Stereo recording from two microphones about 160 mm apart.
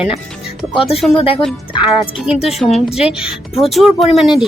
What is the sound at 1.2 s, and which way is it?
Speech, 35° left (ahead or behind).